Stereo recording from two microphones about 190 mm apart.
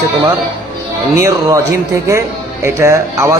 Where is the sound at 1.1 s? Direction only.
15° right (ahead or behind).